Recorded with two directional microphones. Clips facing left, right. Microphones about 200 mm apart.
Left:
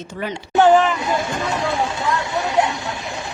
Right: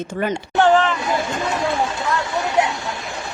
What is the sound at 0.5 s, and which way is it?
Speech, 15° left (ahead or behind).